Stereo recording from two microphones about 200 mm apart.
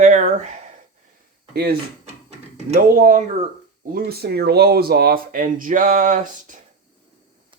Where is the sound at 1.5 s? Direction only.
50° right (ahead or behind).